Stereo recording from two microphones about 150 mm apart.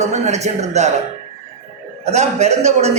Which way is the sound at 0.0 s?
50° right (ahead or behind).